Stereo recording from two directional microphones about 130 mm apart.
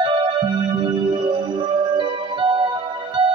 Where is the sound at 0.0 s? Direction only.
40° right (ahead or behind).